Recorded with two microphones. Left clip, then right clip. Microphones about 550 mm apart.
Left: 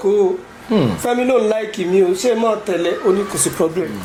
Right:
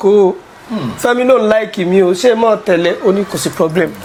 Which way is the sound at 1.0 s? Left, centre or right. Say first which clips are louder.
Right 8 dB; right.